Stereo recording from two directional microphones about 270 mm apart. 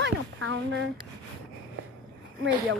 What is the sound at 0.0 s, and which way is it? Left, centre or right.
Speech, right.